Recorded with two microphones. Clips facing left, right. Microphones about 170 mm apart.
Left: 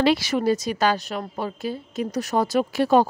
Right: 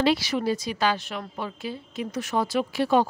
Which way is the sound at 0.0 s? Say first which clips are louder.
Left 3 dB; 55° left (ahead or behind).